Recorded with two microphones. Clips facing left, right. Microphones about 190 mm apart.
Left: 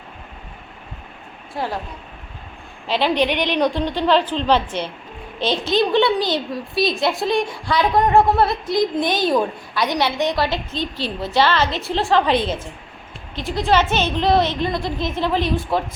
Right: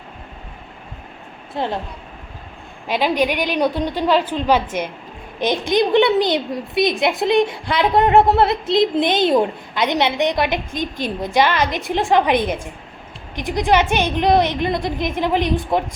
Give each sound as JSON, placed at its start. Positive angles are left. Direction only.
{"t": 1.5, "sound": "a woman's voice", "side_deg": -25}
{"t": 2.8, "sound": "a woman's voice", "side_deg": -10}